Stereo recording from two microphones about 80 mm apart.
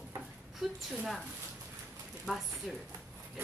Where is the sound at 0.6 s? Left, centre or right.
Centre.